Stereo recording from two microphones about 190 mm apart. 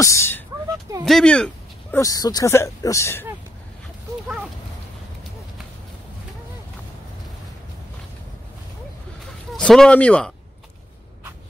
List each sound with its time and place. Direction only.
0.0 s speech: 15° left (ahead or behind)
1.0 s speech: 5° left (ahead or behind)
2.0 s speech: 20° left (ahead or behind)
9.5 s speech: 5° left (ahead or behind)